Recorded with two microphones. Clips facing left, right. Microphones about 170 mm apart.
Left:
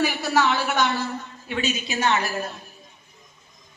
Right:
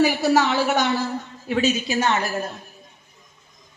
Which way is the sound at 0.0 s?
40° right (ahead or behind).